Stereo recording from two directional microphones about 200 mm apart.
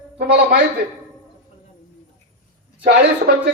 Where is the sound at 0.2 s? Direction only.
55° right (ahead or behind).